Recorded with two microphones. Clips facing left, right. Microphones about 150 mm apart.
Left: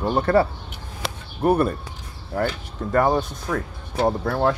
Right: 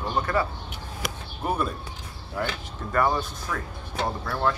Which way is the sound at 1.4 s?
65° left (ahead or behind).